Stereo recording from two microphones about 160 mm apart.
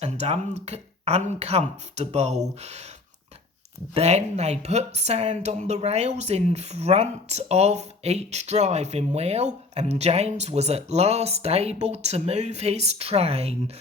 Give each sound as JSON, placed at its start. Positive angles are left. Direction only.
{"t": 0.0, "sound": "a woman's voice", "side_deg": -45}
{"t": 3.9, "sound": "a woman's voice", "side_deg": -40}